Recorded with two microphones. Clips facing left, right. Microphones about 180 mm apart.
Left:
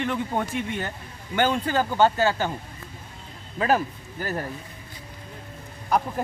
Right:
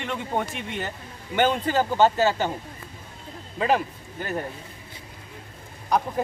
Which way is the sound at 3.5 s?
Centre (ahead or behind).